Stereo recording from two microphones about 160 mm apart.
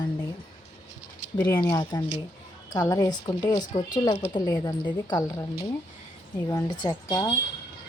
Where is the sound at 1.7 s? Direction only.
25° left (ahead or behind).